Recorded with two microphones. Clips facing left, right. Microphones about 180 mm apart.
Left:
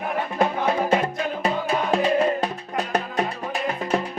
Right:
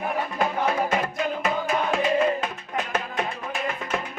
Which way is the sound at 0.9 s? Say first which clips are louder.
Left 3 dB; 30° left (ahead or behind).